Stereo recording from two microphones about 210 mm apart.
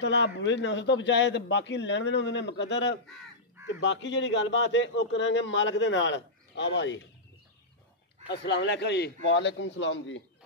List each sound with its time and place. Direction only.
0.0 s speech: 55° left (ahead or behind)
8.3 s speech: 55° left (ahead or behind)